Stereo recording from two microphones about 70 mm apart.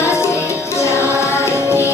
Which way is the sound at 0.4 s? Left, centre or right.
Left.